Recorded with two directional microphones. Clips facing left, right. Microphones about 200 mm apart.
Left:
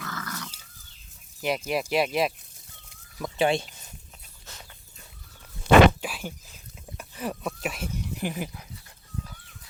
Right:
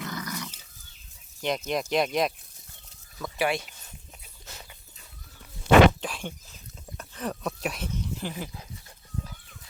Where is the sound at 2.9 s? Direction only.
20° left (ahead or behind).